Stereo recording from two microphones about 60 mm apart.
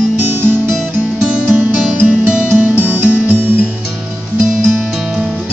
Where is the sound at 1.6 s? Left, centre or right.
Right.